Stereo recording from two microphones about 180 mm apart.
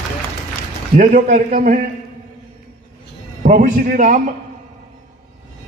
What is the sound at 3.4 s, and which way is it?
Speech, 50° right (ahead or behind).